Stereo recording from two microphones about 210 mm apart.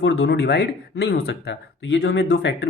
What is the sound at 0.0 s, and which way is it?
Speech, 55° left (ahead or behind).